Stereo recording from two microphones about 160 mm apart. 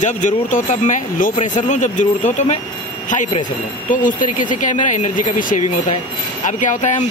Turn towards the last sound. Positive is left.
turn(degrees=50)  # may be behind; listen again after turning